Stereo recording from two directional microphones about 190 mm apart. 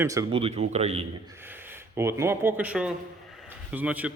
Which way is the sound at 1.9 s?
15° right (ahead or behind).